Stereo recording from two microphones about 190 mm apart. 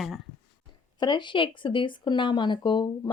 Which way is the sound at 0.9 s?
25° left (ahead or behind).